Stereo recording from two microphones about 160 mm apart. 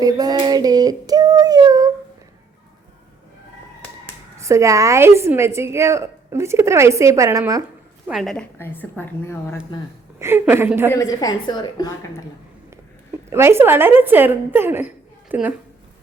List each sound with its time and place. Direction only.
0.0 s child singing: 25° right (ahead or behind)
4.4 s a woman's voice: 20° right (ahead or behind)
8.0 s a woman's voice: centre (ahead or behind)
8.5 s a woman's voice: 15° left (ahead or behind)
10.2 s a woman's voice: 15° right (ahead or behind)
10.9 s a woman's voice: 20° left (ahead or behind)
13.3 s a woman's voice: 15° right (ahead or behind)